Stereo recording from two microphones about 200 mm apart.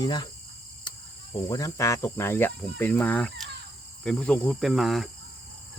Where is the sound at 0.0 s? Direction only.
20° left (ahead or behind).